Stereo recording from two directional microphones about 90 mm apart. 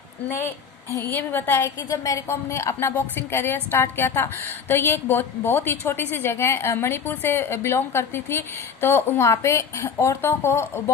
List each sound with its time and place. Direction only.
0.3 s a woman's voice: 25° left (ahead or behind)